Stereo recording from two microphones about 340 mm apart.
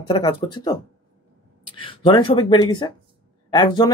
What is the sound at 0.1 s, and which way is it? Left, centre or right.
Speech, centre.